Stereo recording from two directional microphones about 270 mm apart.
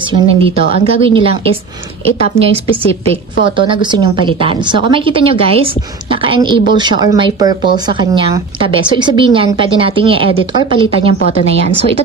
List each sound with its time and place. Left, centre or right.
0.1 s a woman's voice: right
2.4 s a woman's voice: right